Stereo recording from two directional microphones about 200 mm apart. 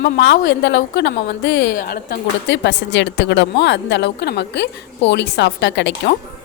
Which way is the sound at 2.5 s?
60° left (ahead or behind).